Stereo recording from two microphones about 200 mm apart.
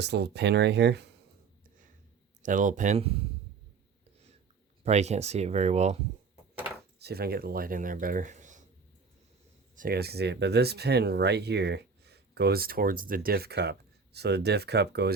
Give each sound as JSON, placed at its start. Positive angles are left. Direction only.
{"t": 0.0, "sound": "speech", "side_deg": -55}
{"t": 2.4, "sound": "speech", "side_deg": -40}
{"t": 4.8, "sound": "speech", "side_deg": -35}
{"t": 7.0, "sound": "speech", "side_deg": -50}
{"t": 9.7, "sound": "speech", "side_deg": -50}